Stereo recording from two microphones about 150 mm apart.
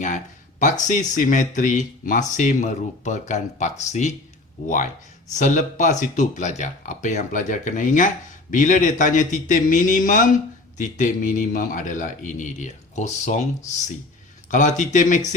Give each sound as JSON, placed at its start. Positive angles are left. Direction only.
{"t": 0.6, "sound": "speech", "side_deg": 55}
{"t": 5.3, "sound": "speech", "side_deg": 60}